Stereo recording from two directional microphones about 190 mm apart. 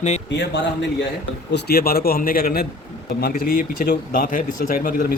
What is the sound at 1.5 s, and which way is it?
Speech, 55° left (ahead or behind).